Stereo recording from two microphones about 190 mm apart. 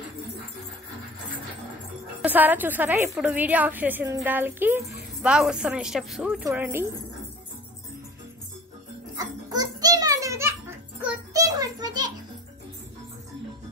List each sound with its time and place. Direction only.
2.2 s a woman's voice: 10° right (ahead or behind)
9.1 s children playing: 20° right (ahead or behind)
11.0 s music: 20° right (ahead or behind)